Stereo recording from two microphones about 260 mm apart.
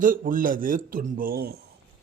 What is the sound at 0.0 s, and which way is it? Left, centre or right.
Speech, right.